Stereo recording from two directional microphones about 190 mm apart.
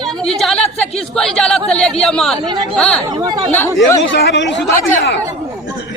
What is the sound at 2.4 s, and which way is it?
Speech, 25° right (ahead or behind).